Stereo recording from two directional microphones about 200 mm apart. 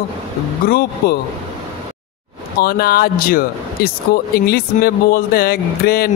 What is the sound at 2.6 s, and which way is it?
Speech, 50° left (ahead or behind).